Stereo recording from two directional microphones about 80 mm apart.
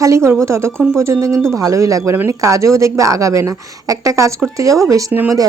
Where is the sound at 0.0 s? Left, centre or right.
Right.